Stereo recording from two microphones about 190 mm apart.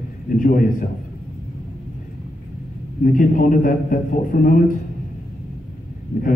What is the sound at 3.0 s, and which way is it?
A man's voice, 45° left (ahead or behind).